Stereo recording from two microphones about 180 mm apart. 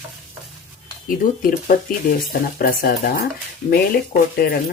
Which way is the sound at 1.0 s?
50° left (ahead or behind).